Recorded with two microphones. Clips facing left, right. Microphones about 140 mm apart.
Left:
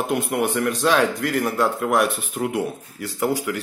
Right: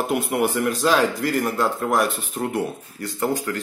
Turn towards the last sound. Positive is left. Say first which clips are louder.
# left 1 dB
turn(degrees=5)  # may be behind; listen again after turning